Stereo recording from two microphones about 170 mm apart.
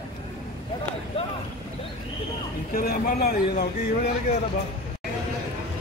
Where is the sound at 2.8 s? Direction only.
60° left (ahead or behind).